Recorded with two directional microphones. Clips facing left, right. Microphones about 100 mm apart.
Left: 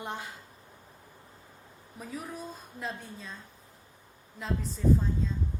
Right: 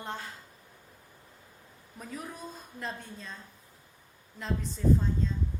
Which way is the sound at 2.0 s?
Centre (ahead or behind).